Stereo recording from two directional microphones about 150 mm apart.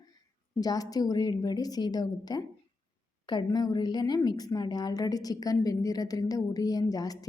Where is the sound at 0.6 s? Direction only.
25° left (ahead or behind).